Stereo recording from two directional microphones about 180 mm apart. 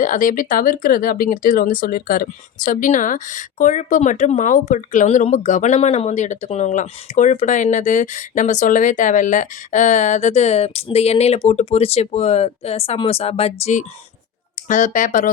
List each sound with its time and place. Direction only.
0.0 s speech: 45° left (ahead or behind)